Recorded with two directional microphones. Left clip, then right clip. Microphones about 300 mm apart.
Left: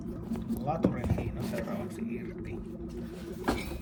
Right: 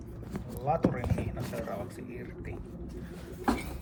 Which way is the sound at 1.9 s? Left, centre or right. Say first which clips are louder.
Left 4 dB; centre.